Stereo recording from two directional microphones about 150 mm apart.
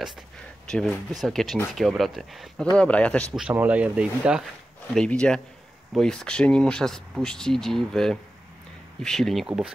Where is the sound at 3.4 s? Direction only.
10° right (ahead or behind).